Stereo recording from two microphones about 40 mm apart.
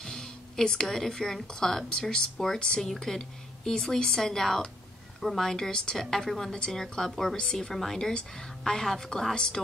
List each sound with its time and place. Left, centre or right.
0.0 s a woman's voice: centre